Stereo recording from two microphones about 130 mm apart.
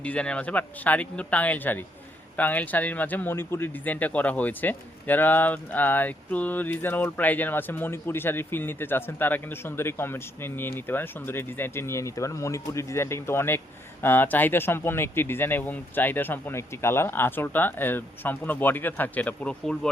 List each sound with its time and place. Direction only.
0.0 s a man's voice: 10° left (ahead or behind)